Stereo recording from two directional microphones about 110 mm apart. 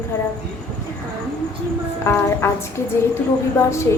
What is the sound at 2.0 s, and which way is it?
A woman's voice, 25° left (ahead or behind).